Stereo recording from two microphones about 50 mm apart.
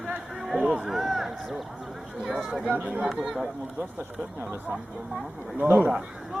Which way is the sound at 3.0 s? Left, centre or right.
Centre.